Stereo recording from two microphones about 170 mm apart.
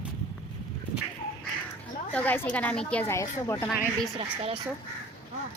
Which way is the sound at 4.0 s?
35° right (ahead or behind).